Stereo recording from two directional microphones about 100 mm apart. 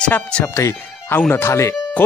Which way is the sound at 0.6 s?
25° left (ahead or behind).